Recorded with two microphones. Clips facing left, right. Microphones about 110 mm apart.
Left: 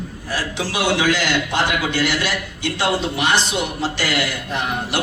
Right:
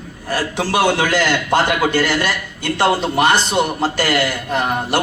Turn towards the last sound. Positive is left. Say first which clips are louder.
# right 5 dB
turn(degrees=-50)  # may be behind; listen again after turning